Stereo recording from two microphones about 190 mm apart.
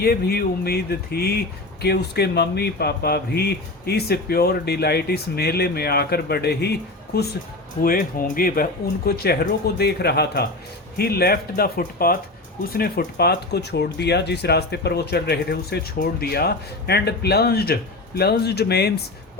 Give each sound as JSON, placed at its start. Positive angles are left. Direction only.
{"t": 0.0, "sound": "speech", "side_deg": 55}
{"t": 7.8, "sound": "speech", "side_deg": 50}